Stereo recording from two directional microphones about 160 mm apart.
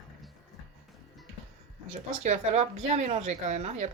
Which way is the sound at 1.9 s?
45° right (ahead or behind).